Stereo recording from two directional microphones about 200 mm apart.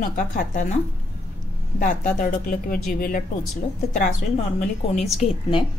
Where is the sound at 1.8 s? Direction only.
40° left (ahead or behind).